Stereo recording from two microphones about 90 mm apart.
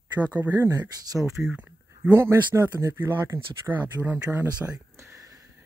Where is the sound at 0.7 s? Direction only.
45° right (ahead or behind).